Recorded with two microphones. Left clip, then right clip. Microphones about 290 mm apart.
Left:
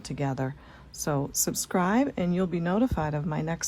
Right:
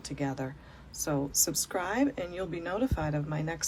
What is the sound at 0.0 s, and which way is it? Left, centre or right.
Speech, left.